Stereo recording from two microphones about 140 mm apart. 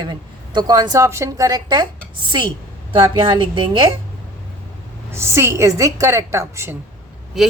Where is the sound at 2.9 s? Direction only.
35° right (ahead or behind).